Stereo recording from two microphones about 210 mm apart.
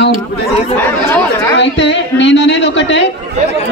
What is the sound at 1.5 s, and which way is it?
A woman's voice, 60° left (ahead or behind).